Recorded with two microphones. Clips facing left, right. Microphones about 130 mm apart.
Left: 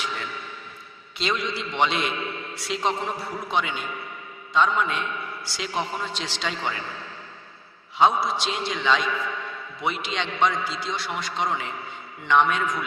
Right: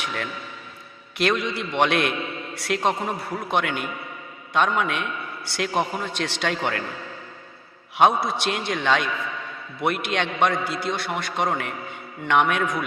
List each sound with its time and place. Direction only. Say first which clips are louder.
0.0 s a sound: right 2 dB; 60° right (ahead or behind)
1.2 s a man's voice: right 4 dB; 60° right (ahead or behind)
7.9 s a man's voice: right 1 dB; 60° right (ahead or behind)